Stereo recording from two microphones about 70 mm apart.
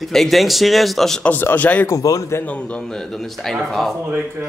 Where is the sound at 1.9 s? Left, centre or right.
Left.